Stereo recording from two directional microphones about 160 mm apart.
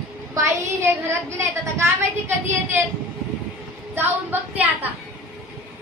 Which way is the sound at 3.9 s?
10° right (ahead or behind).